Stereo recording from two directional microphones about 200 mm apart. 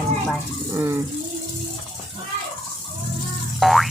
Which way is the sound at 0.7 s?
15° right (ahead or behind).